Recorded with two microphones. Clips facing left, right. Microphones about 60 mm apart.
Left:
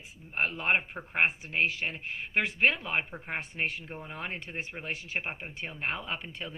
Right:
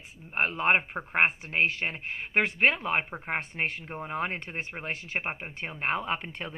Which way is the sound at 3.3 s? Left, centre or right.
Right.